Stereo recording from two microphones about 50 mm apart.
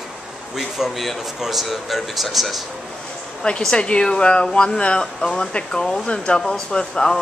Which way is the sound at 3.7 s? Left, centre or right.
Centre.